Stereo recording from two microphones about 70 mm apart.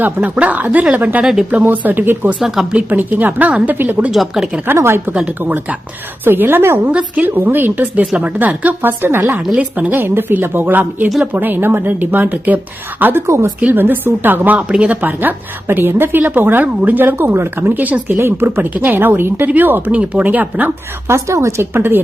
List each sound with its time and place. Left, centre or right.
0.0 s a woman's voice: right
1.2 s speech: centre
1.5 s a woman's voice: right
2.4 s speech: centre
2.9 s a woman's voice: right
4.1 s speech: centre
4.6 s a woman's voice: right
13.2 s a woman's voice: right
13.7 s a woman's voice: right
14.7 s a woman's voice: centre
21.1 s a woman's voice: right
21.7 s a woman's voice: right